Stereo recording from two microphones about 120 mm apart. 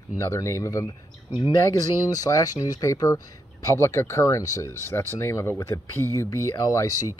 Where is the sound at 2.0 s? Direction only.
30° left (ahead or behind).